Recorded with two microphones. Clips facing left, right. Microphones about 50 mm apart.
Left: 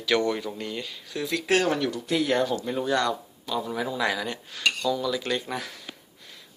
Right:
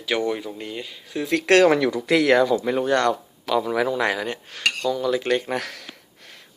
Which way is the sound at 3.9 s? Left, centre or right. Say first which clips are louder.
Right 4 dB; right.